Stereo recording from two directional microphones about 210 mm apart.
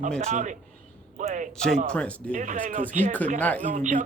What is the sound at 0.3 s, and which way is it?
Speech, 35° right (ahead or behind).